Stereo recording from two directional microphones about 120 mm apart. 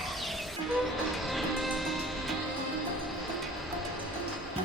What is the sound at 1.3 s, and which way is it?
Music, centre (ahead or behind).